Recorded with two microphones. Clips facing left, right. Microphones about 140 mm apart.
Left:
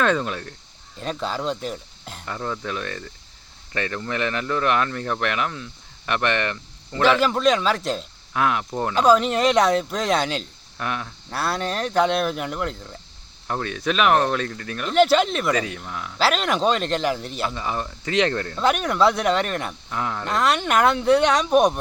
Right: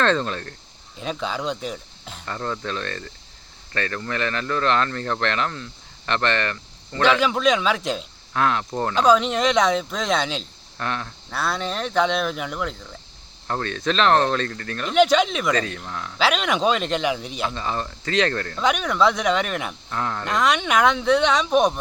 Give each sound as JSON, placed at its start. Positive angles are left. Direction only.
{"t": 0.0, "sound": "speech", "side_deg": 10}
{"t": 0.9, "sound": "speech", "side_deg": -5}
{"t": 7.0, "sound": "speech", "side_deg": 5}
{"t": 8.4, "sound": "speech", "side_deg": 10}
{"t": 17.5, "sound": "speech", "side_deg": 10}
{"t": 18.5, "sound": "speech", "side_deg": 5}
{"t": 19.9, "sound": "speech", "side_deg": 10}